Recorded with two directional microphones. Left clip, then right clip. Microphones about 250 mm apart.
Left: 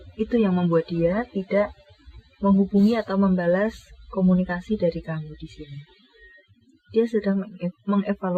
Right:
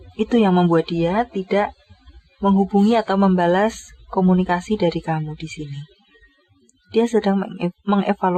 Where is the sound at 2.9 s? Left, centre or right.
Right.